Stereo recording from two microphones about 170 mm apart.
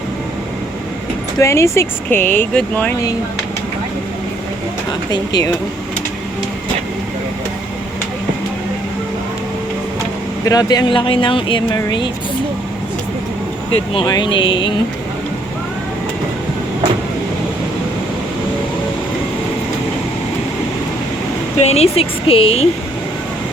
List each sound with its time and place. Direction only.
1.4 s speech: 15° left (ahead or behind)
5.1 s speech: 25° left (ahead or behind)
10.4 s speech: 20° left (ahead or behind)
13.7 s speech: 35° left (ahead or behind)
21.6 s speech: 35° left (ahead or behind)